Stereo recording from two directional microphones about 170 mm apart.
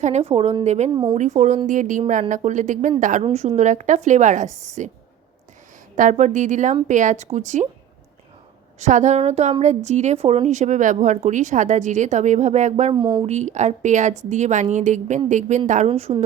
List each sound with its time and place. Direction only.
0.0 s a woman's voice: 40° right (ahead or behind)
6.0 s a woman's voice: 45° right (ahead or behind)
8.8 s a woman's voice: 45° right (ahead or behind)
12.9 s speech: 25° right (ahead or behind)
13.2 s a woman's voice: 45° right (ahead or behind)